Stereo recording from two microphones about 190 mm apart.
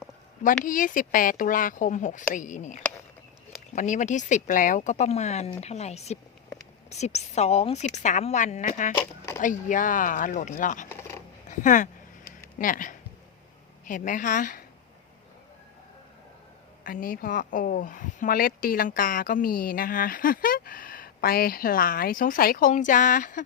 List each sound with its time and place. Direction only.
0.4 s a woman's voice: 45° left (ahead or behind)
9.0 s a sound: 15° left (ahead or behind)
9.4 s a woman's voice: 45° left (ahead or behind)
11.4 s a sound: 40° left (ahead or behind)
12.5 s a woman's voice: 45° left (ahead or behind)
16.8 s a woman's voice: 45° left (ahead or behind)